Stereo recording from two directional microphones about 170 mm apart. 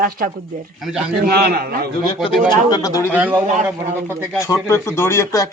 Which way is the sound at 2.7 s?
20° left (ahead or behind).